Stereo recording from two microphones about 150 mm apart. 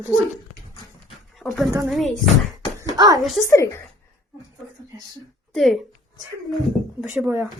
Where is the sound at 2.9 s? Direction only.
25° right (ahead or behind).